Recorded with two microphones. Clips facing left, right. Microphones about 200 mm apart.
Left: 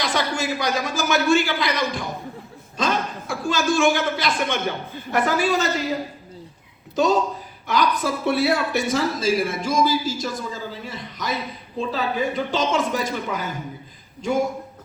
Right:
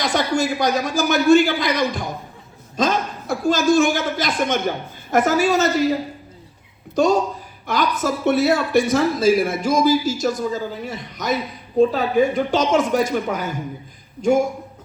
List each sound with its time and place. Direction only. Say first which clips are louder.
0.0 s a woman's voice: right 4 dB; 45° right (ahead or behind)
6.9 s speech: right 2 dB; 50° right (ahead or behind)